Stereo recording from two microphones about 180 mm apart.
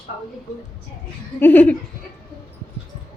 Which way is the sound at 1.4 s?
10° left (ahead or behind).